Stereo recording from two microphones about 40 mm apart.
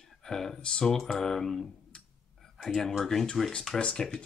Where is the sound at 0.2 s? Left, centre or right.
Centre.